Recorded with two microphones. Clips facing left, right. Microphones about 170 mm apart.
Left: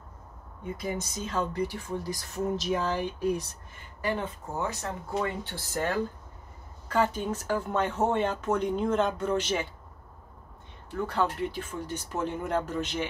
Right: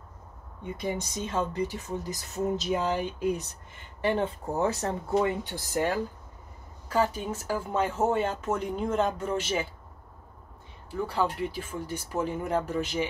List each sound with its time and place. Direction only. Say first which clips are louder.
0.8 s speech: right 2 dB; 25° right (ahead or behind)
4.0 s speech: right 4 dB; 30° right (ahead or behind)
5.1 s speech: right 5 dB; 20° right (ahead or behind)
10.9 s speech: even; 5° right (ahead or behind)